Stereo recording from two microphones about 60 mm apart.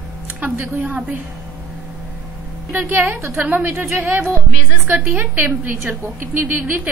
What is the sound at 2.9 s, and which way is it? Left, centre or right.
A woman's voice, right.